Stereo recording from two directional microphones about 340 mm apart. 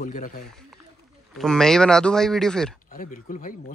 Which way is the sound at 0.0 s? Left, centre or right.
Left.